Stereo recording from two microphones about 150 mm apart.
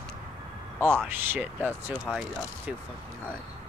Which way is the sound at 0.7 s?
15° right (ahead or behind).